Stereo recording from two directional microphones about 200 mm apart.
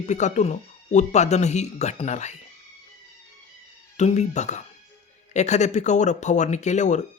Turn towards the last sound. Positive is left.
turn(degrees=35)  # may be behind; listen again after turning